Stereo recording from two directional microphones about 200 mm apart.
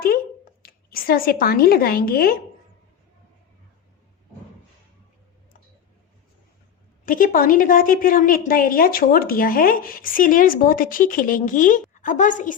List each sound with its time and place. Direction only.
0.6 s a woman's voice: 45° left (ahead or behind)
7.0 s a woman's voice: 45° left (ahead or behind)